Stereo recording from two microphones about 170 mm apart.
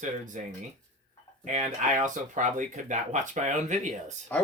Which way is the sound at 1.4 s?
45° right (ahead or behind).